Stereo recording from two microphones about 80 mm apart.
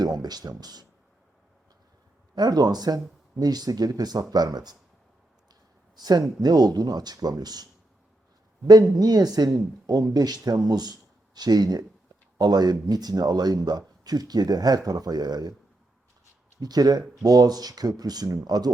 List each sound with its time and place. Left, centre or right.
0.0 s a man's voice: right
2.3 s a man's voice: right
6.0 s a man's voice: right
9.0 s a man's voice: right
16.6 s a man's voice: right